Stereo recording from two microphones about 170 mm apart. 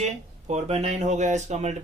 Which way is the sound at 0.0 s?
40° right (ahead or behind).